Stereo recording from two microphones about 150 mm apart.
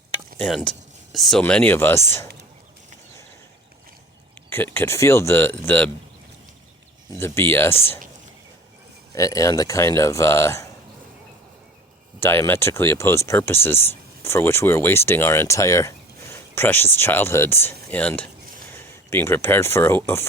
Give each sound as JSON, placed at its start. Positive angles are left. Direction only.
{"t": 0.3, "sound": "speech", "side_deg": 5}
{"t": 4.4, "sound": "speech", "side_deg": 15}
{"t": 7.2, "sound": "speech", "side_deg": 15}
{"t": 9.1, "sound": "speech", "side_deg": 20}
{"t": 12.2, "sound": "speech", "side_deg": 15}